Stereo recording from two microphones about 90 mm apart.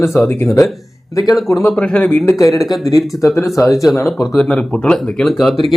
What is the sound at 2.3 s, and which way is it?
Speech, 40° left (ahead or behind).